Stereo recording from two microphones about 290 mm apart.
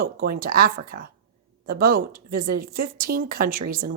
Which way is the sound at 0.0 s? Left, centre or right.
Right.